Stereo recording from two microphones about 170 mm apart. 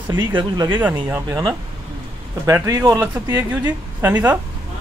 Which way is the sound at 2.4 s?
20° right (ahead or behind).